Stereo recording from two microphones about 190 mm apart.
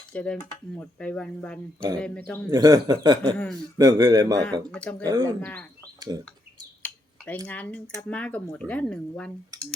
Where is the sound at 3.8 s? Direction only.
20° right (ahead or behind).